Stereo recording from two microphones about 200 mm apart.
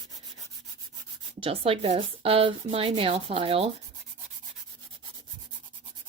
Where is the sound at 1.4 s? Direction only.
30° right (ahead or behind).